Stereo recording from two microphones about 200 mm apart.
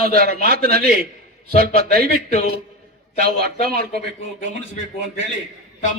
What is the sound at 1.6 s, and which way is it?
Speech, 50° right (ahead or behind).